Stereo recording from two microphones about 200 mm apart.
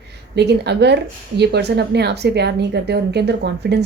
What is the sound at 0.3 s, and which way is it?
Speech, 55° right (ahead or behind).